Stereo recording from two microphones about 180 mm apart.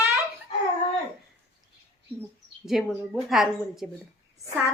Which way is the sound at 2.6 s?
Centre (ahead or behind).